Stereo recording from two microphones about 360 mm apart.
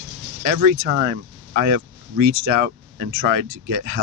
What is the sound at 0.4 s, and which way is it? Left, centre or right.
Speech, right.